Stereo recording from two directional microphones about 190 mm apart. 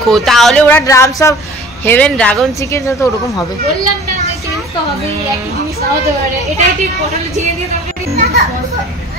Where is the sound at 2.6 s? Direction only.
15° left (ahead or behind).